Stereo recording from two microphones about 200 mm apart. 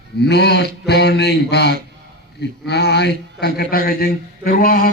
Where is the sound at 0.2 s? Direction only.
55° left (ahead or behind).